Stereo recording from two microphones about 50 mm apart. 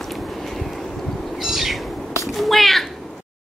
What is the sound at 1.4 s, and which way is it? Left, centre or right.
Owl, centre.